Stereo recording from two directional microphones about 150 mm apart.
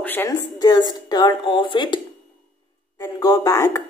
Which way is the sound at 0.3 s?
25° left (ahead or behind).